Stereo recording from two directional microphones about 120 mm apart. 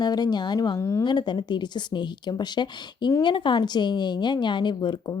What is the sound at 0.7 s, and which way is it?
Speech, 25° left (ahead or behind).